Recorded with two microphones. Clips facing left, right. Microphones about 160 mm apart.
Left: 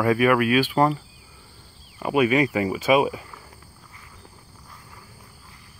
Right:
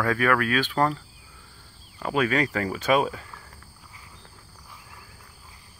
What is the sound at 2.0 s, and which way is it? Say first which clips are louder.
Speech: left 4 dB; 10° left (ahead or behind).